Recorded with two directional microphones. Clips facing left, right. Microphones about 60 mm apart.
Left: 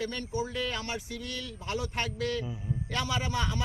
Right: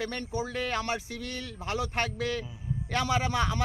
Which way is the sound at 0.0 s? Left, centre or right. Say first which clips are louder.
Even; right.